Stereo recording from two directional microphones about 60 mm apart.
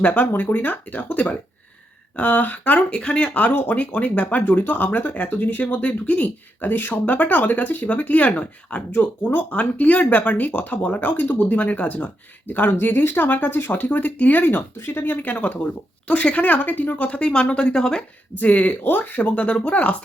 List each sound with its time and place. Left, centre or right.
0.0 s speech: left
3.5 s speech: left; by 18.0 s centre
18.3 s speech: left